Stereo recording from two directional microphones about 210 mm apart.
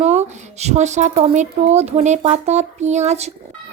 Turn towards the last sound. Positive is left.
turn(degrees=-30)  # may be behind; listen again after turning